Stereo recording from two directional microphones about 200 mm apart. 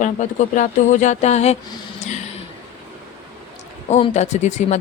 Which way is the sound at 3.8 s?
35° left (ahead or behind).